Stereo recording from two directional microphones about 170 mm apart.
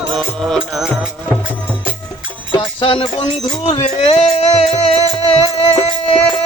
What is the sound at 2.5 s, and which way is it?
Music, 30° left (ahead or behind).